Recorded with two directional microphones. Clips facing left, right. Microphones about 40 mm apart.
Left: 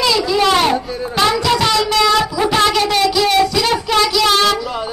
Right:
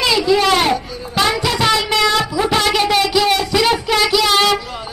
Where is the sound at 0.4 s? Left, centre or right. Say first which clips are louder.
Left 1 dB; centre.